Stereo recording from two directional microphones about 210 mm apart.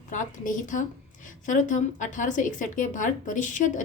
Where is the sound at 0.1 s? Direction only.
40° left (ahead or behind).